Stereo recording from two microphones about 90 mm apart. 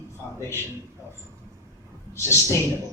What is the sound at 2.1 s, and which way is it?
Speech, 30° left (ahead or behind).